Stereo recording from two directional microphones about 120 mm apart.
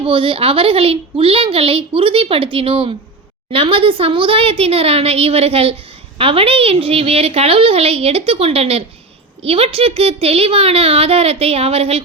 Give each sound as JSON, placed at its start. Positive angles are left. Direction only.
{"t": 0.0, "sound": "speech", "side_deg": -50}